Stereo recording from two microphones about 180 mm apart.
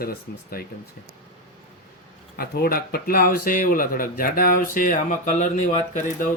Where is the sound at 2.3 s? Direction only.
60° left (ahead or behind).